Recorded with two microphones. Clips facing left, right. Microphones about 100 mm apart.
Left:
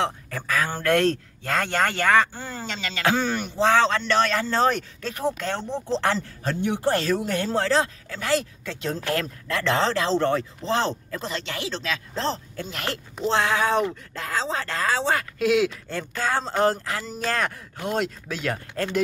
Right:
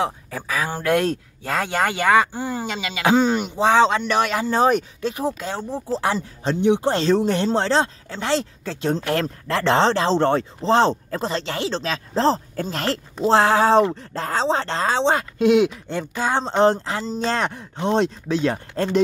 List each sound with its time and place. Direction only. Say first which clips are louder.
0.0 s speech: right 2 dB; 10° right (ahead or behind); by 18.9 s 25° right (ahead or behind)